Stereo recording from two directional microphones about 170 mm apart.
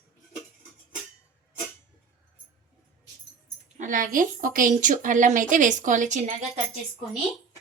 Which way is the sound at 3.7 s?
50° right (ahead or behind).